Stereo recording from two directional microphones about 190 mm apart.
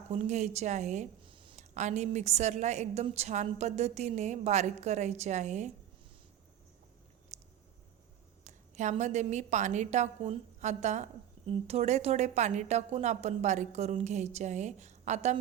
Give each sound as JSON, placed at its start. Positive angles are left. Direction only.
{"t": 0.1, "sound": "speech", "side_deg": -35}
{"t": 1.7, "sound": "a woman's voice", "side_deg": -40}
{"t": 7.3, "sound": "a sound", "side_deg": -35}
{"t": 8.4, "sound": "a woman's voice", "side_deg": -40}